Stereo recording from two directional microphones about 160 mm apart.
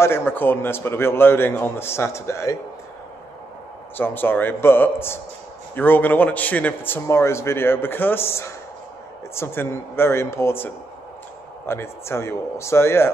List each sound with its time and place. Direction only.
0.0 s a man's voice: 15° left (ahead or behind)
3.9 s a man's voice: 10° left (ahead or behind)